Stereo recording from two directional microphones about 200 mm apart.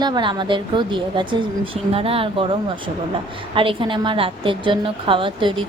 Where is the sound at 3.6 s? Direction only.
25° right (ahead or behind).